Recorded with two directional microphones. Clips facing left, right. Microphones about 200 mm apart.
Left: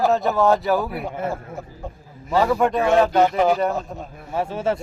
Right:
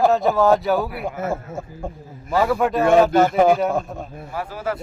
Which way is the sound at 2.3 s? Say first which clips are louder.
Even; centre (ahead or behind).